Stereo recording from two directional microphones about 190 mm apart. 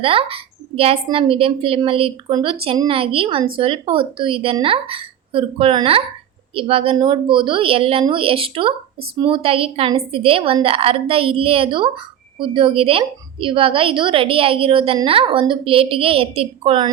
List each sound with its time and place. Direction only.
0.0 s a woman's voice: 30° right (ahead or behind)